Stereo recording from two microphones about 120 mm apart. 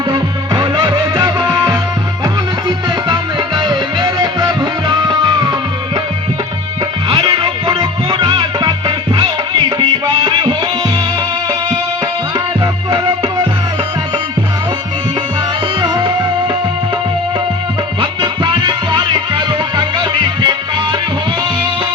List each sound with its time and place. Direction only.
0.1 s music: 35° right (ahead or behind)
7.1 s music: 40° right (ahead or behind)
12.9 s music: 40° right (ahead or behind)
15.8 s music: 40° right (ahead or behind)
18.0 s music: 45° right (ahead or behind)